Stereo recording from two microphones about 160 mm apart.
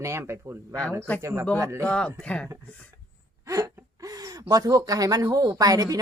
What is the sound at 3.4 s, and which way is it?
A woman's voice, 20° right (ahead or behind).